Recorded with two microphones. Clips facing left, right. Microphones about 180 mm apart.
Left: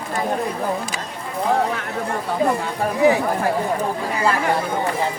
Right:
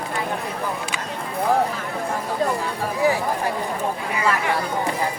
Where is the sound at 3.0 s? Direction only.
20° left (ahead or behind).